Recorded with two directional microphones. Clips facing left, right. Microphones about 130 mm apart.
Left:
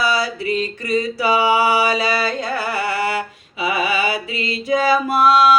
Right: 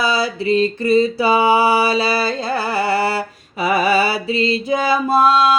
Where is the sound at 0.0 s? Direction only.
25° right (ahead or behind).